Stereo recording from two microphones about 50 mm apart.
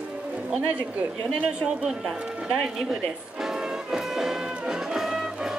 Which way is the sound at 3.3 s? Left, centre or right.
Centre.